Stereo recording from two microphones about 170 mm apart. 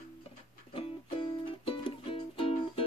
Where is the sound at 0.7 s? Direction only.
30° left (ahead or behind).